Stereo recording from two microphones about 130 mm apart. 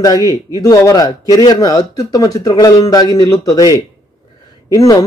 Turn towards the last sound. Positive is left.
turn(degrees=25)  # may be behind; listen again after turning